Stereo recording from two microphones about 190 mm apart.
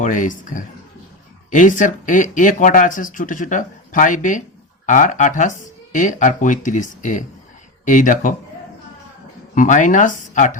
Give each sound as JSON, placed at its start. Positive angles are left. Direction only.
{"t": 0.0, "sound": "speech", "side_deg": 40}
{"t": 9.6, "sound": "speech", "side_deg": 40}